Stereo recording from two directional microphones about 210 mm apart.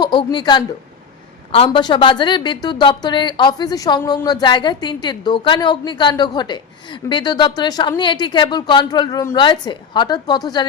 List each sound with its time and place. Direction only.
0.0 s a woman's voice: 20° left (ahead or behind)